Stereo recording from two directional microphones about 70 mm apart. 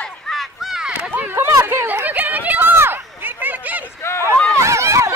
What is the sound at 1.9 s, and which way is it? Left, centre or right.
Chatter, right.